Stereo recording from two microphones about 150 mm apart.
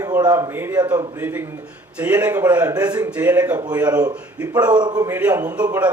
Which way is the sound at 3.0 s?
10° right (ahead or behind).